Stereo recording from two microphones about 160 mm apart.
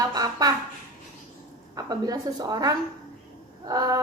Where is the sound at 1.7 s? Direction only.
25° right (ahead or behind).